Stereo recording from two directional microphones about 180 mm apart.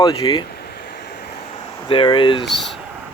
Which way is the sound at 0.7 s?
55° left (ahead or behind).